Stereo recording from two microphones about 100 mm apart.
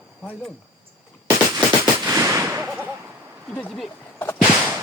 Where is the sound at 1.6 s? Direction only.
20° right (ahead or behind).